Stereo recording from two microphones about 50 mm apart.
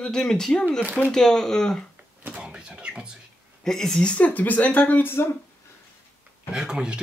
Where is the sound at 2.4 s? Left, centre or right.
Centre.